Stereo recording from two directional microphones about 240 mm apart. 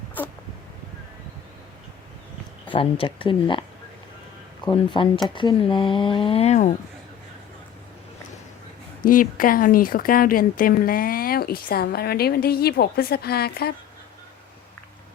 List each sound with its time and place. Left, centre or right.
2.7 s speech: left
4.6 s speech: centre
9.0 s speech: left